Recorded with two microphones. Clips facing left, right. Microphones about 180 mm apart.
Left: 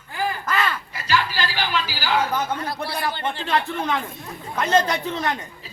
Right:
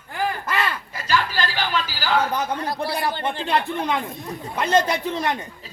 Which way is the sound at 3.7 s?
15° right (ahead or behind).